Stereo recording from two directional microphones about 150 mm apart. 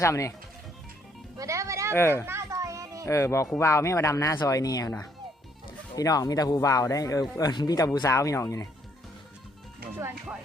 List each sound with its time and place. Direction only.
0.0 s speech: 20° left (ahead or behind)
1.4 s music: 20° right (ahead or behind)
1.9 s speech: 15° left (ahead or behind)
2.2 s music: 20° right (ahead or behind)
3.1 s speech: 20° left (ahead or behind)